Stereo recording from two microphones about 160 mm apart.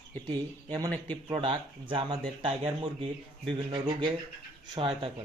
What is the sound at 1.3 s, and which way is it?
Speech, 30° right (ahead or behind).